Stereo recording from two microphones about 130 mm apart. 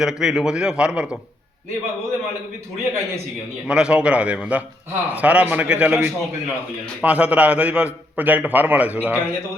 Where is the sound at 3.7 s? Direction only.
5° right (ahead or behind).